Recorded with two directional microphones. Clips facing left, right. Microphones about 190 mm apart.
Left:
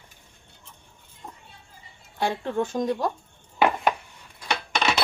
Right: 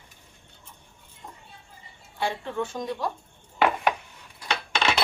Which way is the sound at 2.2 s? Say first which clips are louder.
Left 3 dB; 40° left (ahead or behind).